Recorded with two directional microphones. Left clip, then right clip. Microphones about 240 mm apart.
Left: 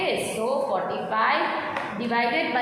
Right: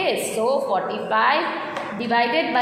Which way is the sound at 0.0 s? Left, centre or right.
Right.